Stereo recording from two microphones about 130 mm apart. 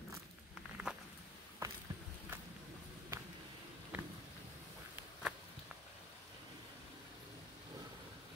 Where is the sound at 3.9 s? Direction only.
10° right (ahead or behind).